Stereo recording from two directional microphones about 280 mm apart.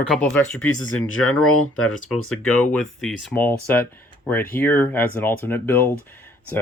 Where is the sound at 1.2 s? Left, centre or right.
Left.